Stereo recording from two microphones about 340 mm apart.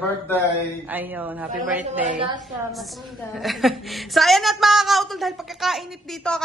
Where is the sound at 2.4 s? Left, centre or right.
Centre.